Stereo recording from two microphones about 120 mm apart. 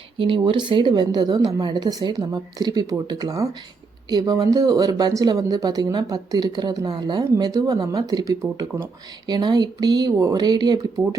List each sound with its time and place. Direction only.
0.2 s speech: 45° right (ahead or behind)